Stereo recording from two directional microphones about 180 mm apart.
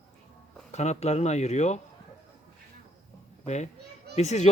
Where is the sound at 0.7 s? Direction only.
40° left (ahead or behind).